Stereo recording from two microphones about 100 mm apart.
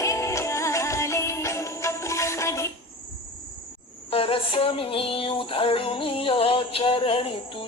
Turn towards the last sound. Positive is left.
turn(degrees=65)  # may be behind; listen again after turning